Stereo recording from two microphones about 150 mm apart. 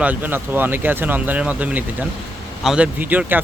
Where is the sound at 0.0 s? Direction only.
10° right (ahead or behind).